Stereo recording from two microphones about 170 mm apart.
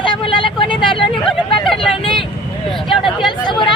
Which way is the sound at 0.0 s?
30° left (ahead or behind).